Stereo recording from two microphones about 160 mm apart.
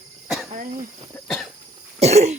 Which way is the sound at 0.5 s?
55° right (ahead or behind).